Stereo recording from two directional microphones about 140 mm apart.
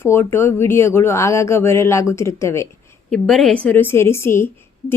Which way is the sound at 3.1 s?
5° left (ahead or behind).